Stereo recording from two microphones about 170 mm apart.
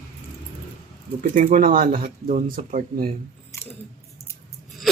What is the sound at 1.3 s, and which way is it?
Speech, 50° right (ahead or behind).